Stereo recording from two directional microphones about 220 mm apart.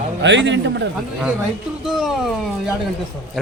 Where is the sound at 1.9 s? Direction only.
Centre (ahead or behind).